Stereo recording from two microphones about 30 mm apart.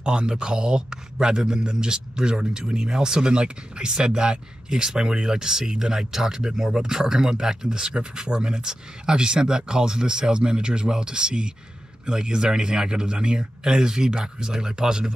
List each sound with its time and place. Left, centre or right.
0.0 s speech: right